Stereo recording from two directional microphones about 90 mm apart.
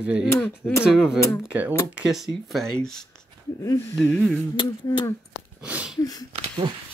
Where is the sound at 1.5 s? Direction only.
15° right (ahead or behind).